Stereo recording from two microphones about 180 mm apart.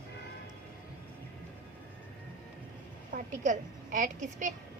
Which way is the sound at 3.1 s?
45° right (ahead or behind).